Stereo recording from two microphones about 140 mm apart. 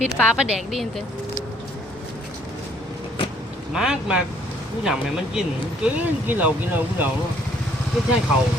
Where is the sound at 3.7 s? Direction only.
5° right (ahead or behind).